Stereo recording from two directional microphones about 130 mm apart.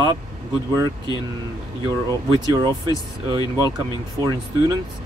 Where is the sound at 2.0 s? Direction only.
35° right (ahead or behind).